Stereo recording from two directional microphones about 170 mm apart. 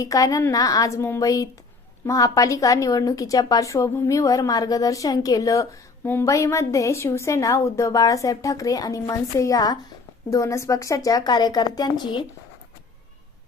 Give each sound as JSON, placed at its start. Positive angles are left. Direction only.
{"t": 0.0, "sound": "a woman's voice", "side_deg": 20}